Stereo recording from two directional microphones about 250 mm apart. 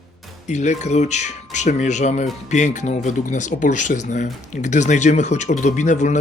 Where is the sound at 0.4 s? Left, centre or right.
Left.